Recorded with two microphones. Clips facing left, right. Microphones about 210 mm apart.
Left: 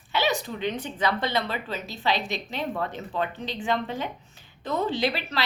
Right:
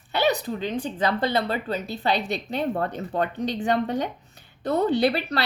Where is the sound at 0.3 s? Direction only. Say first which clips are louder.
Right 3 dB; 35° right (ahead or behind).